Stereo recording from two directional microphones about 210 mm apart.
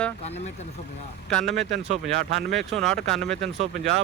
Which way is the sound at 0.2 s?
30° left (ahead or behind).